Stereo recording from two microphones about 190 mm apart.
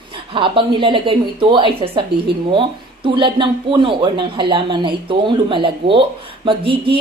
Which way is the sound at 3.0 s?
25° right (ahead or behind).